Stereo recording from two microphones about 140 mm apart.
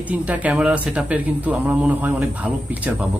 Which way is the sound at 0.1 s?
10° right (ahead or behind).